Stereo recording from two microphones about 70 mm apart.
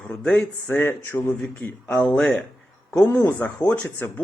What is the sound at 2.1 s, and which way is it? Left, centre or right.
Speech, centre.